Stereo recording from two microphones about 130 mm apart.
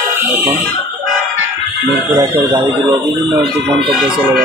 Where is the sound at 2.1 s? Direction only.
30° right (ahead or behind).